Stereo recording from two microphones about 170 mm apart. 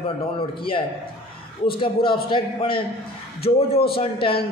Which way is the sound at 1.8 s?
30° left (ahead or behind).